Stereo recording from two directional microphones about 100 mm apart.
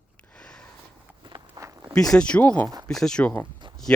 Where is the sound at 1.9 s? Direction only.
5° left (ahead or behind).